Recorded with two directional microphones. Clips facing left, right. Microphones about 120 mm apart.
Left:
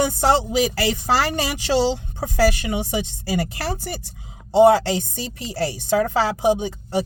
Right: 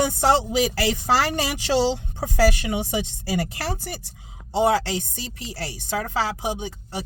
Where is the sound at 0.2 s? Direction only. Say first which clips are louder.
Even; 40° left (ahead or behind).